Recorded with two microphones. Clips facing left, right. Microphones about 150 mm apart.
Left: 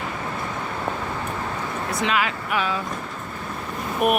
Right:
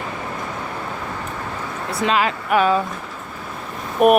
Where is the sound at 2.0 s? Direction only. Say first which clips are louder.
Right 7 dB; 35° right (ahead or behind).